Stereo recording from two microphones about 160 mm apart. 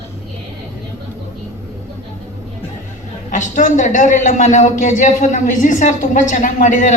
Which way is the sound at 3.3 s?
55° left (ahead or behind).